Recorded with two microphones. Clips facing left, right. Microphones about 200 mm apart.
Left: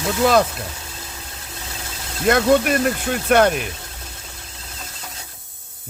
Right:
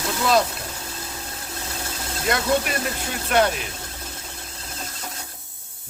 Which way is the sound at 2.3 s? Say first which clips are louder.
Left 7 dB; 55° left (ahead or behind).